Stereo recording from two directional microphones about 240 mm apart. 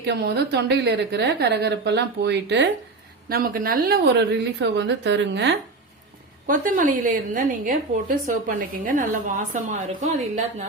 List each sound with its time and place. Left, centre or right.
0.0 s a woman's voice: right
6.5 s a woman's voice: right